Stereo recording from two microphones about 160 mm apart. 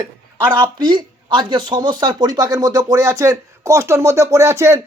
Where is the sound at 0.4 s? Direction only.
30° right (ahead or behind).